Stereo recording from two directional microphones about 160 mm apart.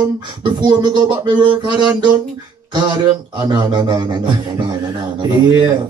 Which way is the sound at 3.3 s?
25° right (ahead or behind).